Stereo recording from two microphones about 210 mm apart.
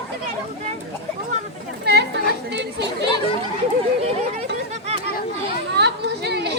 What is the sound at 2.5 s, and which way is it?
Chatter, 55° right (ahead or behind).